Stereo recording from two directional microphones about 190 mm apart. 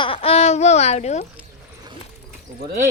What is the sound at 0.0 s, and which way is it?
Speech, 30° left (ahead or behind).